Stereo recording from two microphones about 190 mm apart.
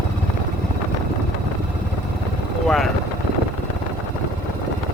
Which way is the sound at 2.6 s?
Centre (ahead or behind).